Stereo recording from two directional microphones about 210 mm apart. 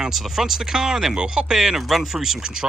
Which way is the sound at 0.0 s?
Centre (ahead or behind).